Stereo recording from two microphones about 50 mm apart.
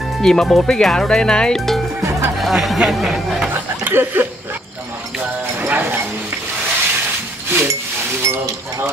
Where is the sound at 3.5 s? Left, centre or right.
Right.